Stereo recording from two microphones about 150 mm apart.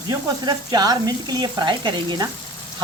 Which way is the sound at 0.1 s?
25° right (ahead or behind).